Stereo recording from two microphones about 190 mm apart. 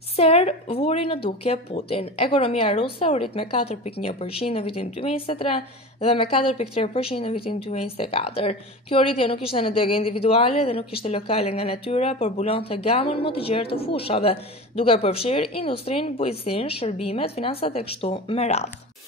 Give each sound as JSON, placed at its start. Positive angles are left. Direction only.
{"t": 0.1, "sound": "speech", "side_deg": 30}